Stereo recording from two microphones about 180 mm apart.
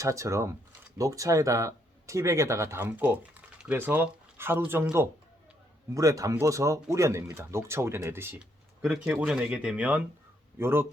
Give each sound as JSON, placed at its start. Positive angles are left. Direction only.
{"t": 0.0, "sound": "speech", "side_deg": -15}